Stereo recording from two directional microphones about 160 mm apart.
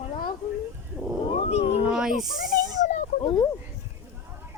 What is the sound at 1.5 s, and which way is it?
Speech, 40° left (ahead or behind).